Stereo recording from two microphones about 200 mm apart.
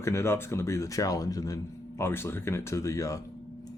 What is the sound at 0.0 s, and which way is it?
Speech, 15° left (ahead or behind).